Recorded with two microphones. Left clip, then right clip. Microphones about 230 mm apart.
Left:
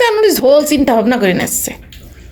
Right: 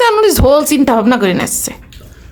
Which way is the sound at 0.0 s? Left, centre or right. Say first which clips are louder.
Right 1 dB; centre.